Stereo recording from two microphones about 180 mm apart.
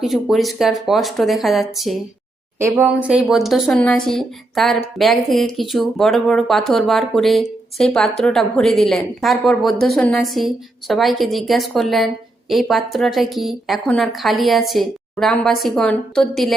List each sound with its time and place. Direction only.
0.0 s a woman's voice: centre (ahead or behind)
2.6 s a woman's voice: 15° right (ahead or behind)